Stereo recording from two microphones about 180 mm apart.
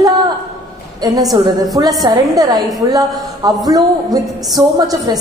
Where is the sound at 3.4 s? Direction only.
20° right (ahead or behind).